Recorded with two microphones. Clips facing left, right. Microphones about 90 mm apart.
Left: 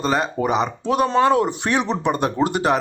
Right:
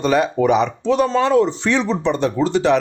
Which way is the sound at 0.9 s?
55° left (ahead or behind).